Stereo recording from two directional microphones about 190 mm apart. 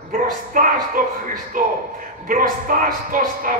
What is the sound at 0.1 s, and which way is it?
A man's voice, 45° right (ahead or behind).